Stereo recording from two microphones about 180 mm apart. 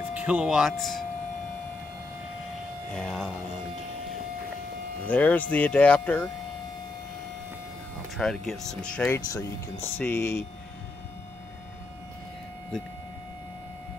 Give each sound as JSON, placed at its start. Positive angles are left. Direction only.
{"t": 0.1, "sound": "speech", "side_deg": -5}
{"t": 2.9, "sound": "speech", "side_deg": 5}
{"t": 5.0, "sound": "speech", "side_deg": 10}
{"t": 8.2, "sound": "speech", "side_deg": 0}
{"t": 9.2, "sound": "speech", "side_deg": 20}